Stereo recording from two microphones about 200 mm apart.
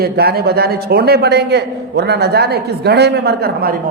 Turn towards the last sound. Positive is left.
turn(degrees=-45)  # may be behind; listen again after turning